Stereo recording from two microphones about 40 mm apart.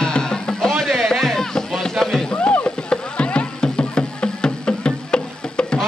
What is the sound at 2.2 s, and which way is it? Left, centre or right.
Music, left.